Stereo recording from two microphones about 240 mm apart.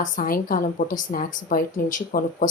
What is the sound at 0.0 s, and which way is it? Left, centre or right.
A woman's voice, left.